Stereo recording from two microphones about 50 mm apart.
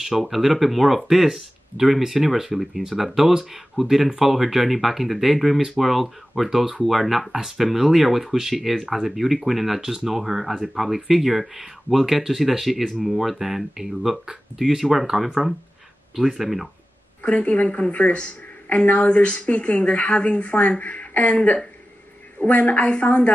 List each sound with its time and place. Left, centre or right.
0.0 s speech: centre
17.2 s a woman's voice: left